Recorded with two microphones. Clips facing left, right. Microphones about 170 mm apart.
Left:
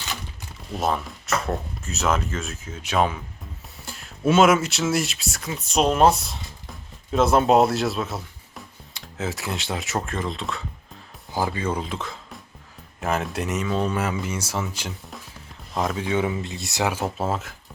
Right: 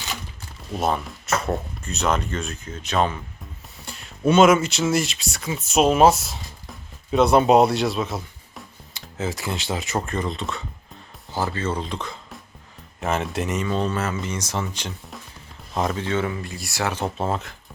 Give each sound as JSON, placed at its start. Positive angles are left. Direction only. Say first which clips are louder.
{"t": 0.7, "sound": "speech", "louder": "right 1 dB", "side_deg": 0}
{"t": 11.3, "sound": "speech", "louder": "even", "side_deg": 15}
{"t": 16.0, "sound": "speech", "louder": "left 1 dB", "side_deg": 15}
{"t": 16.9, "sound": "speech", "louder": "right 1 dB", "side_deg": 5}